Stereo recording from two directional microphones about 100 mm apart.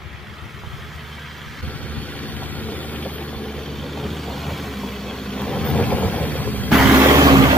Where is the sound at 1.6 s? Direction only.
15° left (ahead or behind).